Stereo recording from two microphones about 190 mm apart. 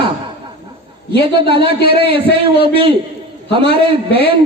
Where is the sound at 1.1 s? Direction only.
25° right (ahead or behind).